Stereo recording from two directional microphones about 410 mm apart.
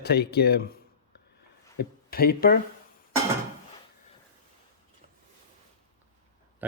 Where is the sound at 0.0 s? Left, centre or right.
Left.